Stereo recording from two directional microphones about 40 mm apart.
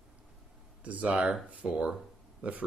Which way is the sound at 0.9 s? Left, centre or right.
Right.